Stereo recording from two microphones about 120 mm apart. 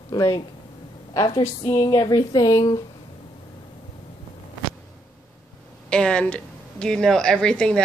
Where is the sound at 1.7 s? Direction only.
30° left (ahead or behind).